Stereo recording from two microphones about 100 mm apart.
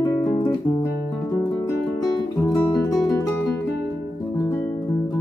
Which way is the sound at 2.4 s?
30° left (ahead or behind).